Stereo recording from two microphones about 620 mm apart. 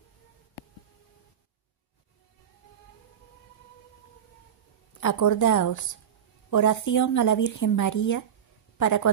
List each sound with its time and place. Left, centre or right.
5.0 s speech: left